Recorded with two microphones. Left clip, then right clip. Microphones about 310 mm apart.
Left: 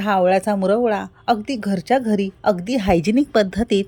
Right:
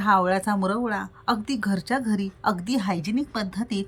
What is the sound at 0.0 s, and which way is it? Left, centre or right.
A woman's voice, centre.